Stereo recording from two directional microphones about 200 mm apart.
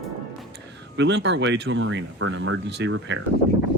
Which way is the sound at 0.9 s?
60° right (ahead or behind).